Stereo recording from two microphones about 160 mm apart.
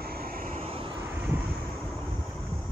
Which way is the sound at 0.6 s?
35° right (ahead or behind).